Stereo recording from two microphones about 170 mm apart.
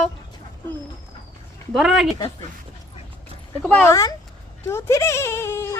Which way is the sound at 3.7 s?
10° left (ahead or behind).